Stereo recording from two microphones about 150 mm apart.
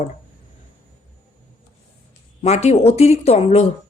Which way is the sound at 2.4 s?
45° left (ahead or behind).